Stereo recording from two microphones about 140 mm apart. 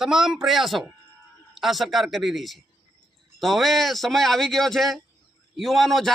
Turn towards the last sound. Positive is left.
turn(degrees=0)  # may be behind; listen again after turning